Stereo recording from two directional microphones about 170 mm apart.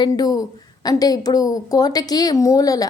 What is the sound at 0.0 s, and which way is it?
A woman's voice, 20° left (ahead or behind).